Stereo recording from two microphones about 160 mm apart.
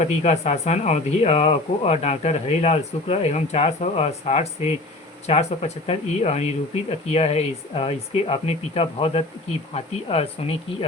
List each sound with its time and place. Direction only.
0.0 s speech: 45° left (ahead or behind)